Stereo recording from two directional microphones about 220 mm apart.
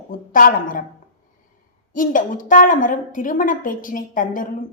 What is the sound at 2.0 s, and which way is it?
A woman's voice, 35° left (ahead or behind).